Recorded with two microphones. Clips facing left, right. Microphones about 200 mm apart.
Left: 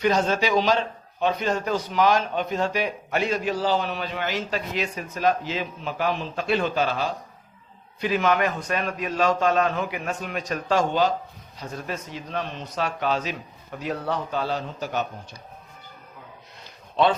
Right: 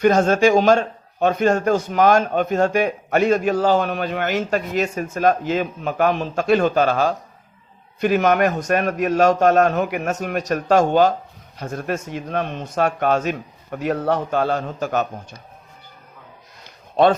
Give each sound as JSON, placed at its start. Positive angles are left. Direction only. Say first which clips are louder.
{"t": 0.0, "sound": "a man's voice", "louder": "right 7 dB", "side_deg": -50}
{"t": 9.9, "sound": "a man's voice", "louder": "right 7 dB", "side_deg": -45}